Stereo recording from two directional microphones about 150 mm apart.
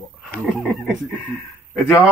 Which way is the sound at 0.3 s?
10° left (ahead or behind).